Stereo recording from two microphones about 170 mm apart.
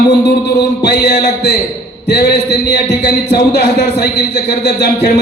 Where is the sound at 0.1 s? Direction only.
75° left (ahead or behind).